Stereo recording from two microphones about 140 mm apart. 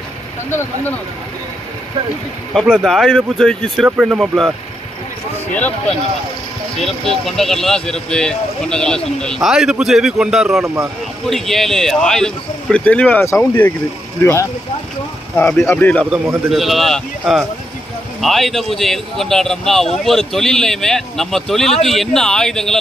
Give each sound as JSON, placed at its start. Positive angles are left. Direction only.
{"t": 2.5, "sound": "speech", "side_deg": 0}
{"t": 6.8, "sound": "speech", "side_deg": 0}
{"t": 10.6, "sound": "speech", "side_deg": -20}
{"t": 11.2, "sound": "speech", "side_deg": 0}
{"t": 15.3, "sound": "speech", "side_deg": 5}
{"t": 16.4, "sound": "speech", "side_deg": 0}